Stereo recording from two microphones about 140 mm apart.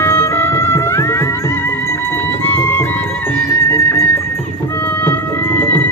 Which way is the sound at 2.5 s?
15° left (ahead or behind).